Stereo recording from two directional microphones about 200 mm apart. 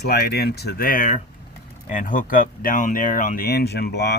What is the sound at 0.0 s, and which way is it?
Speech, 55° left (ahead or behind).